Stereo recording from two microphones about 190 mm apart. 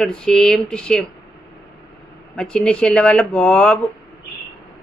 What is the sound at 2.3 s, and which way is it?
A man's voice, 5° left (ahead or behind).